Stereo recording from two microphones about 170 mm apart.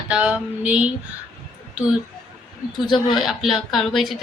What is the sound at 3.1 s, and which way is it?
Speech, centre (ahead or behind).